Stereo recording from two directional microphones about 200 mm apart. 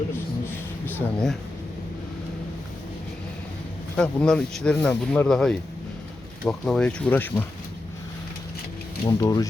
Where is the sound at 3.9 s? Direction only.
5° left (ahead or behind).